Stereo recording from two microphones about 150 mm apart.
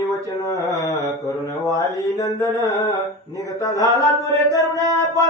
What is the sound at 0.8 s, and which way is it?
Speech, 25° left (ahead or behind).